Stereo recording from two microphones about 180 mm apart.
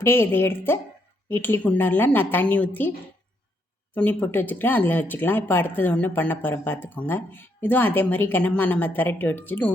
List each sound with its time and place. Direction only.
0.0 s speech: 15° left (ahead or behind)
3.9 s speech: 10° left (ahead or behind)